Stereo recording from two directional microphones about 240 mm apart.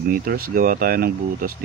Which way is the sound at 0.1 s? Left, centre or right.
Right.